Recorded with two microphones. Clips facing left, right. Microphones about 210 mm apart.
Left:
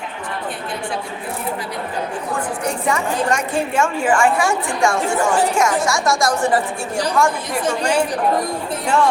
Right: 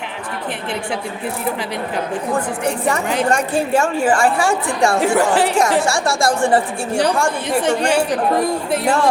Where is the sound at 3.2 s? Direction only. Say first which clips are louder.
Right 2 dB; 35° right (ahead or behind).